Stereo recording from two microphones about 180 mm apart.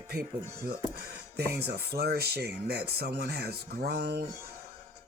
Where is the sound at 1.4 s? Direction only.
65° right (ahead or behind).